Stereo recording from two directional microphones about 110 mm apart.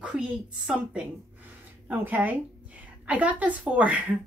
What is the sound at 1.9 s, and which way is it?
A woman's voice, 15° right (ahead or behind).